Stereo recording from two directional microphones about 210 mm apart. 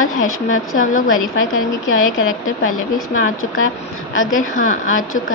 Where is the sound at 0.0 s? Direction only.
75° left (ahead or behind).